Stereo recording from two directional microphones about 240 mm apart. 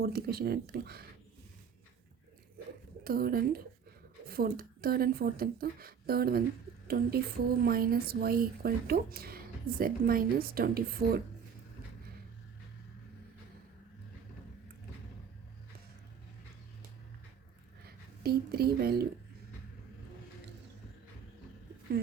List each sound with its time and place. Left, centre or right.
0.0 s a woman's voice: right
3.0 s a woman's voice: right
17.8 s speech: right